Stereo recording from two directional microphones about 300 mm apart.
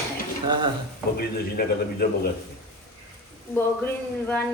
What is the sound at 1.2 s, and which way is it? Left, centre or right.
A man's voice, left.